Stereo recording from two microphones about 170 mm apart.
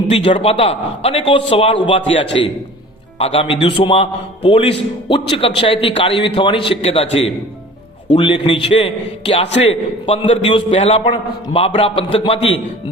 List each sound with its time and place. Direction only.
0.3 s a man's voice: 35° left (ahead or behind)